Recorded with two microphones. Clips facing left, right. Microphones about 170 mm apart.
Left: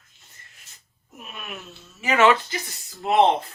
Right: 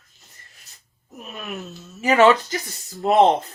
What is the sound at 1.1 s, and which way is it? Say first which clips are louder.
Speech: right 5 dB; 40° right (ahead or behind).